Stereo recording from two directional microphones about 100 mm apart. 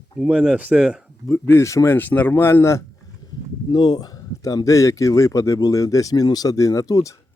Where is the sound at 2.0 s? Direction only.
15° left (ahead or behind).